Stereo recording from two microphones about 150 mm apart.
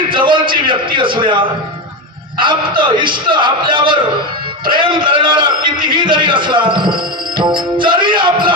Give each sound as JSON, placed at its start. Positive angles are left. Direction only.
{"t": 0.1, "sound": "a man's voice", "side_deg": -35}
{"t": 2.4, "sound": "music", "side_deg": -30}
{"t": 5.0, "sound": "music", "side_deg": -35}